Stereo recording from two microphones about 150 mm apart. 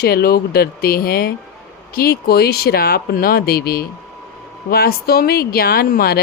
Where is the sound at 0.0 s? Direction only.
90° left.